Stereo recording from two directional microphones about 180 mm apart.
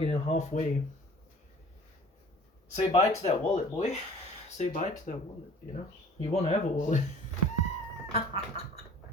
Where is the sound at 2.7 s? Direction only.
35° left (ahead or behind).